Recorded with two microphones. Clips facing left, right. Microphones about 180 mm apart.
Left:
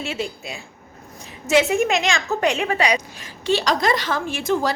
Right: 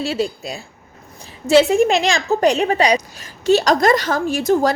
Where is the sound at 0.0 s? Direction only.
35° right (ahead or behind).